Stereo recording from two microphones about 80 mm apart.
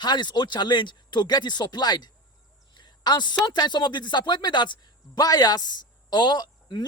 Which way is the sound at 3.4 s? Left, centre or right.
Left.